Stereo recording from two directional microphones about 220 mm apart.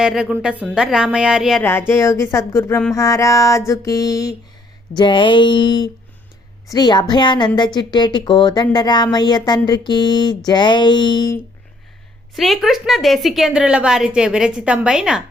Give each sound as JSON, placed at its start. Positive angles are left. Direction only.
{"t": 0.0, "sound": "a woman's voice", "side_deg": 0}
{"t": 1.9, "sound": "a sound", "side_deg": 10}
{"t": 4.9, "sound": "speech", "side_deg": 20}
{"t": 12.3, "sound": "a woman's voice", "side_deg": 0}